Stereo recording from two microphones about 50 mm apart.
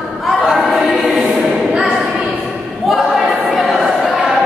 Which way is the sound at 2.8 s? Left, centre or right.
Centre.